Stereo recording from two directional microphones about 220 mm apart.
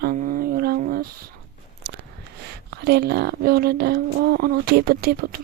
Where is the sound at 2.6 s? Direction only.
50° right (ahead or behind).